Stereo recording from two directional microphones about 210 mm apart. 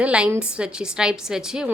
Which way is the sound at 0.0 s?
5° right (ahead or behind).